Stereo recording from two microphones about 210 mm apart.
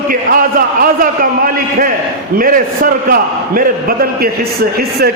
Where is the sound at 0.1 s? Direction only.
40° right (ahead or behind).